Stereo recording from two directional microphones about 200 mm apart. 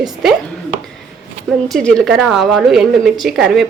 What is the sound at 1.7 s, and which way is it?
A woman's voice, 5° left (ahead or behind).